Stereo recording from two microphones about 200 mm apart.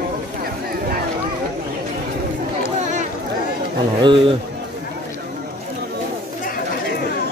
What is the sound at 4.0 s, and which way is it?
Speech, 25° right (ahead or behind).